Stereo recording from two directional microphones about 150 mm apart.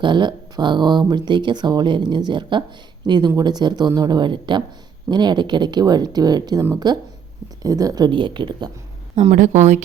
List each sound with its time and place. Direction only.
0.0 s speech: 30° right (ahead or behind)
9.1 s speech: 50° right (ahead or behind)